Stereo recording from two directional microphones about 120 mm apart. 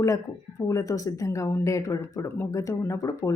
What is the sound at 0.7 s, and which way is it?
A woman's voice, 30° left (ahead or behind).